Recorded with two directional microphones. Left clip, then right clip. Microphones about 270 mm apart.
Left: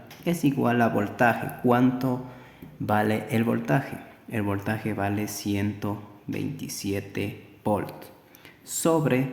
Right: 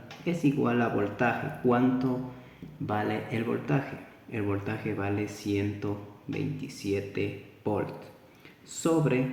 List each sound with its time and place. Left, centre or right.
0.3 s speech: left